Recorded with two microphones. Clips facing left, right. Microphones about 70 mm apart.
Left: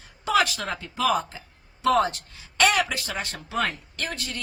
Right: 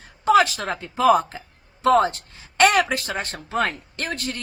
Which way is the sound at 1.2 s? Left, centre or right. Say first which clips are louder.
Right 5 dB; right.